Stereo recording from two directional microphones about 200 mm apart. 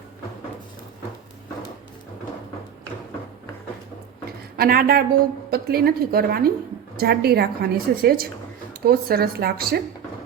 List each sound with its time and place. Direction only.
4.5 s a woman's voice: 50° right (ahead or behind)